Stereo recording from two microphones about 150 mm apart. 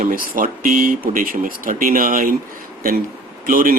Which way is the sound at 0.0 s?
65° right (ahead or behind).